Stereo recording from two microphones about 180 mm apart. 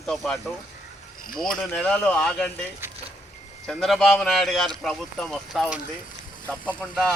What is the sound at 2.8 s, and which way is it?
Vehicle, 15° right (ahead or behind).